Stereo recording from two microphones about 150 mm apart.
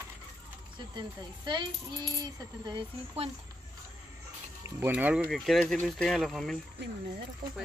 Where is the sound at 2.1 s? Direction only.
30° right (ahead or behind).